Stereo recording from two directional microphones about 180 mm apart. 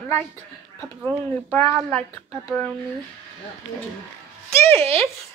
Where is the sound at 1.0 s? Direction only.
5° left (ahead or behind).